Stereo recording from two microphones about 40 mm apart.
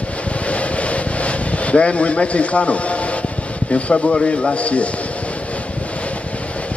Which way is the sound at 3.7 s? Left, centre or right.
Left.